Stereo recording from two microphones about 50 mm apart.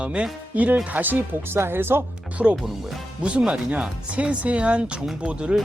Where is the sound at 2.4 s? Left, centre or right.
Right.